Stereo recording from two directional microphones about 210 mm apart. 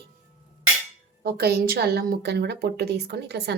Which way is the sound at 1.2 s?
50° right (ahead or behind).